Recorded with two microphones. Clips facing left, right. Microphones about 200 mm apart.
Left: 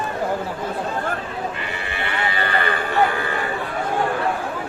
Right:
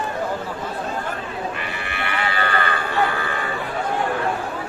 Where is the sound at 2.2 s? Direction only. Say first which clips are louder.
Even; 20° left (ahead or behind).